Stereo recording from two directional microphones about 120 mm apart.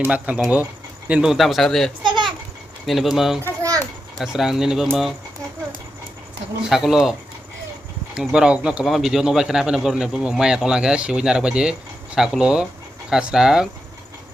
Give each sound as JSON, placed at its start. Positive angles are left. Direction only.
{"t": 0.0, "sound": "speech", "side_deg": -10}
{"t": 2.0, "sound": "a sound", "side_deg": -40}
{"t": 2.8, "sound": "a man's voice", "side_deg": 0}
{"t": 3.6, "sound": "children playing", "side_deg": -30}
{"t": 4.2, "sound": "a man's voice", "side_deg": -5}
{"t": 6.7, "sound": "a man's voice", "side_deg": 0}